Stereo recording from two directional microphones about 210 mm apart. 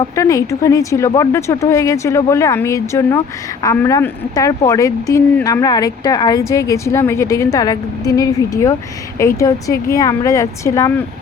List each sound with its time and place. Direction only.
0.2 s speech: 15° left (ahead or behind)